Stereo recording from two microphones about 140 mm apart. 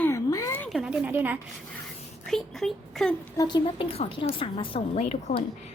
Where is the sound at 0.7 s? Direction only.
5° right (ahead or behind).